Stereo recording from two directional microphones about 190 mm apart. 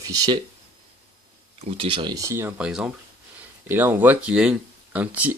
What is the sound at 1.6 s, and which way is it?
Speech, 30° right (ahead or behind).